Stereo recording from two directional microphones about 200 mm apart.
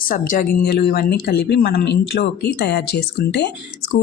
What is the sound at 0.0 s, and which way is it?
Speech, 45° left (ahead or behind).